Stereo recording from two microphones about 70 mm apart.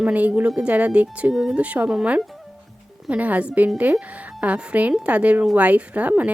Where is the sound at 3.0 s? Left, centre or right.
Centre.